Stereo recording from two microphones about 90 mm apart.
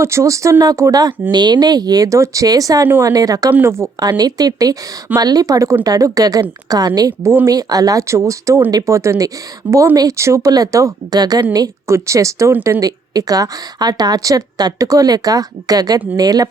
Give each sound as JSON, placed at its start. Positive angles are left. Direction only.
{"t": 0.0, "sound": "a woman's voice", "side_deg": -30}
{"t": 1.3, "sound": "a woman's voice", "side_deg": -55}
{"t": 3.5, "sound": "a woman's voice", "side_deg": -30}
{"t": 4.2, "sound": "a woman's voice", "side_deg": -45}
{"t": 11.9, "sound": "a woman's voice", "side_deg": -30}